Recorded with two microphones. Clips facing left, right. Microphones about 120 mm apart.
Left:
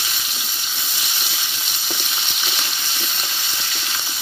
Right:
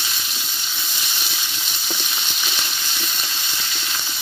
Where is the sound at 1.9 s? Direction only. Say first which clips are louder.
Even; 5° left (ahead or behind).